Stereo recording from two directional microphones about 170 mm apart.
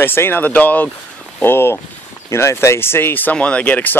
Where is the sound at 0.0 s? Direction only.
10° left (ahead or behind).